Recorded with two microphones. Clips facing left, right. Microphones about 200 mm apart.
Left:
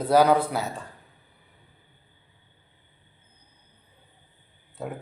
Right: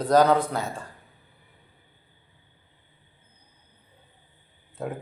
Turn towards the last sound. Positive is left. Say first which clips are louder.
# right 2 dB
turn(degrees=0)  # may be behind; listen again after turning